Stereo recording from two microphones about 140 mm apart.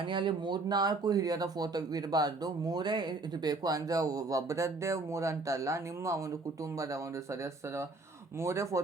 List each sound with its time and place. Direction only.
0.0 s speech: 35° right (ahead or behind)